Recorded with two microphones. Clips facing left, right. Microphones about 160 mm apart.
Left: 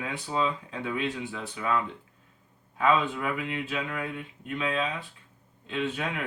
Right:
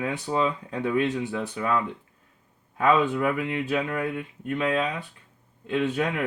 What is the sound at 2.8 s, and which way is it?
Speech, 50° right (ahead or behind).